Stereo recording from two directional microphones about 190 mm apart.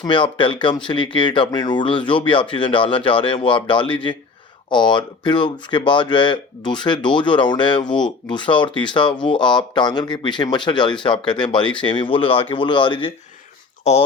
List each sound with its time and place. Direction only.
0.0 s speech: 25° left (ahead or behind)
13.9 s speech: 35° left (ahead or behind)